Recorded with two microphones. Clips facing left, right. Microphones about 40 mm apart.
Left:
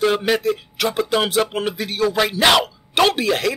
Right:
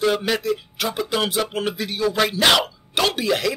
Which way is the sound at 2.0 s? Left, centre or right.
Left.